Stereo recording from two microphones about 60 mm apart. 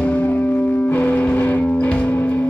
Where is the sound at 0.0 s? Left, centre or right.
Left.